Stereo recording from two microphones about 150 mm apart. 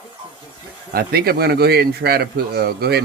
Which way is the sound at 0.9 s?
90° right.